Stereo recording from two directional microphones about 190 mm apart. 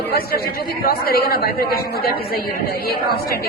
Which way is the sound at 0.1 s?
55° left (ahead or behind).